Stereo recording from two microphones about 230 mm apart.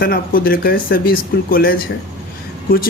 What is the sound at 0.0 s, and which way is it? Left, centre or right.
Speech, left.